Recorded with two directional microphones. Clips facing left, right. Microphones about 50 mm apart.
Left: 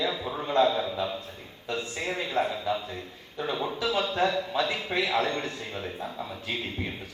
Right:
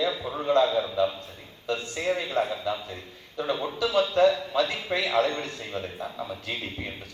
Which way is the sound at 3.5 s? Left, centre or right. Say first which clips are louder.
Right 1 dB; centre.